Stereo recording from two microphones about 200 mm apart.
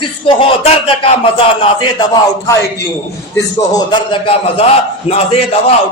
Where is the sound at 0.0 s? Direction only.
25° left (ahead or behind).